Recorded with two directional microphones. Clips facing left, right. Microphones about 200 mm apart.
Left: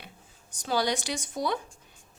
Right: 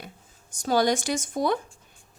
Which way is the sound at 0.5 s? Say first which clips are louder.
Right 5 dB; 45° right (ahead or behind).